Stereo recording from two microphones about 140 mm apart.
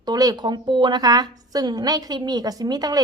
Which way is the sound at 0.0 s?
25° right (ahead or behind).